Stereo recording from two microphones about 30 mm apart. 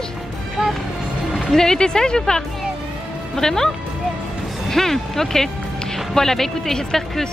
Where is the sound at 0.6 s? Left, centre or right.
Right.